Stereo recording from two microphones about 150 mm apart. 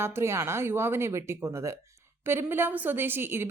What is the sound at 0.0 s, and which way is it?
A woman's voice, 15° right (ahead or behind).